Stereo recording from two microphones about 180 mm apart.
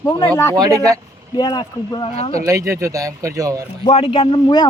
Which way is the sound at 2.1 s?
35° left (ahead or behind).